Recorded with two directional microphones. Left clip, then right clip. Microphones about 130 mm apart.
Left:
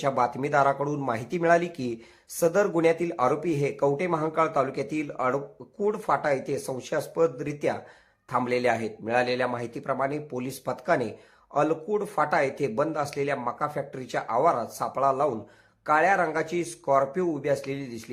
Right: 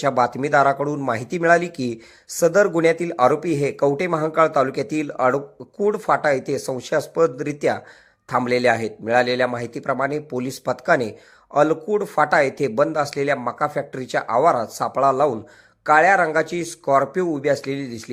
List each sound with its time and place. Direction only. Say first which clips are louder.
0.0 s speech: right 6 dB; 25° right (ahead or behind)